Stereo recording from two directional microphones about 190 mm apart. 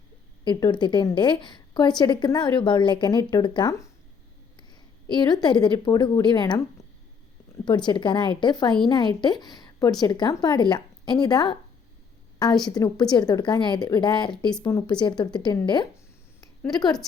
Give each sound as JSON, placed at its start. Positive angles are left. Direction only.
{"t": 0.4, "sound": "a woman's voice", "side_deg": 20}
{"t": 5.0, "sound": "a woman's voice", "side_deg": 25}
{"t": 7.6, "sound": "a woman's voice", "side_deg": 25}
{"t": 12.7, "sound": "a woman's voice", "side_deg": 20}